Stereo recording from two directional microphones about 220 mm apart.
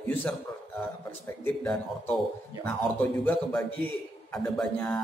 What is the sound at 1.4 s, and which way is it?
A man's voice, 5° left (ahead or behind).